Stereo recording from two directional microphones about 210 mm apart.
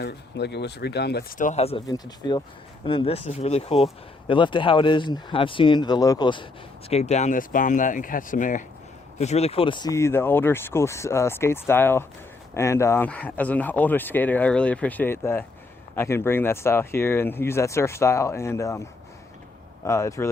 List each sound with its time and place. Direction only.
0.0 s speech: 50° left (ahead or behind); by 20.2 s 15° left (ahead or behind)